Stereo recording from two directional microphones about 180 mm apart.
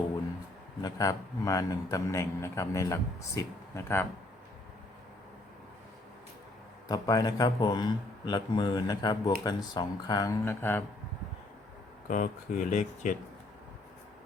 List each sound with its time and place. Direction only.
0.8 s a man's voice: 20° left (ahead or behind)
6.8 s speech: 20° left (ahead or behind)
12.0 s speech: 45° left (ahead or behind)